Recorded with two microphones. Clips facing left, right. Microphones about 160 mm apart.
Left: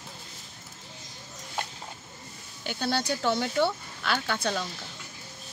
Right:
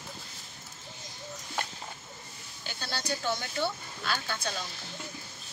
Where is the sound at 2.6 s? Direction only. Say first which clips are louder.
Left 7 dB; 60° left (ahead or behind).